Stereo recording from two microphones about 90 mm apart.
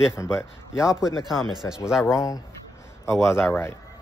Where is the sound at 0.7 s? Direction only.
5° right (ahead or behind).